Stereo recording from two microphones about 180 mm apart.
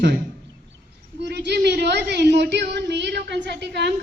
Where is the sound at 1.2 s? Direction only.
65° right (ahead or behind).